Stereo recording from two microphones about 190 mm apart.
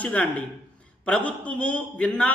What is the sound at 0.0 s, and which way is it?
A man's voice, 5° left (ahead or behind).